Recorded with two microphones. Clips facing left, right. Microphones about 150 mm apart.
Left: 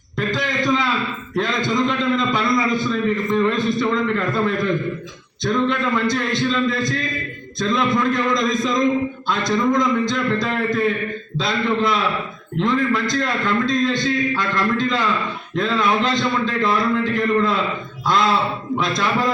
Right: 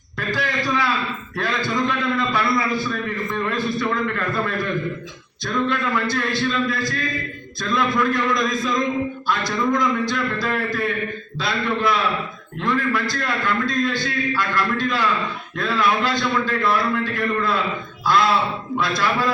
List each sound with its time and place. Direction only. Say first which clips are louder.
0.3 s a sound: left 2 dB; 20° left (ahead or behind)
1.4 s a man's voice: left 3 dB; 20° left (ahead or behind)
18.8 s a man's voice: left 1 dB; 20° left (ahead or behind)